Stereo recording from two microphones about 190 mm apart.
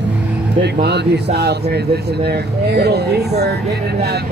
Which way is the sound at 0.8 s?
60° right (ahead or behind).